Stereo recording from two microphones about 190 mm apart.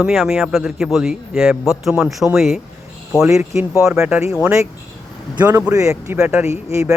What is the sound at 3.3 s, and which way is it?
Speech, 15° right (ahead or behind).